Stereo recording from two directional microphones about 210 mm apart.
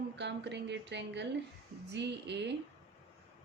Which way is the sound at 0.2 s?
55° right (ahead or behind).